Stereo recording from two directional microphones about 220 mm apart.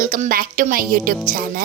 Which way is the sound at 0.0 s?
40° right (ahead or behind).